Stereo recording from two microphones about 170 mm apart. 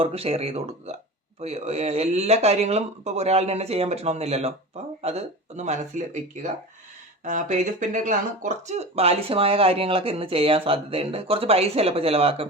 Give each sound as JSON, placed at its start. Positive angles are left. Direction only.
{"t": 0.0, "sound": "speech", "side_deg": -35}
{"t": 7.3, "sound": "speech", "side_deg": -45}